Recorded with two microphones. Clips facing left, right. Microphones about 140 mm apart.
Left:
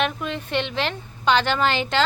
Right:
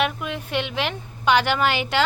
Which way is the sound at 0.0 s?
10° right (ahead or behind).